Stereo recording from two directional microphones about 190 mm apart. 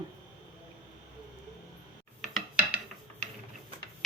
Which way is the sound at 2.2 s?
5° right (ahead or behind).